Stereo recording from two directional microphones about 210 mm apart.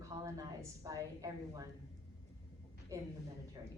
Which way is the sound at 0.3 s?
15° right (ahead or behind).